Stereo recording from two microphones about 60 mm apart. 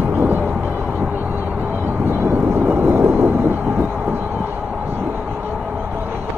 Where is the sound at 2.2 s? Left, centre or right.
Right.